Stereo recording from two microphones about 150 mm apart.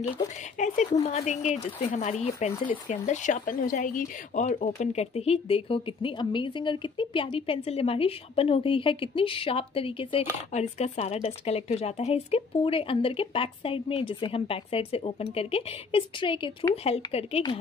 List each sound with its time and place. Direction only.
0.6 s speech: 55° left (ahead or behind); by 10.6 s 35° left (ahead or behind)
10.6 s speech: 45° left (ahead or behind)